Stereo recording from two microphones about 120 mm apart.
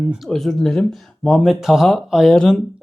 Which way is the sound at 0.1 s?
Centre (ahead or behind).